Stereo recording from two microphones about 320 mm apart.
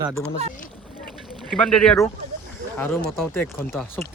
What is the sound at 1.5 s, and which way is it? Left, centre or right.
Speech, centre.